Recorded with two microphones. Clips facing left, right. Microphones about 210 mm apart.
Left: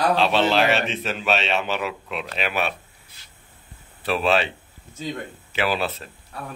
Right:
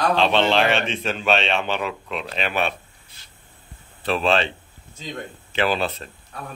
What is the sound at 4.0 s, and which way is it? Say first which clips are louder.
Speech: even; 5° left (ahead or behind).